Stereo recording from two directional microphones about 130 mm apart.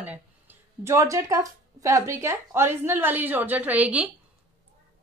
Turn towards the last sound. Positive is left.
turn(degrees=-10)  # may be behind; listen again after turning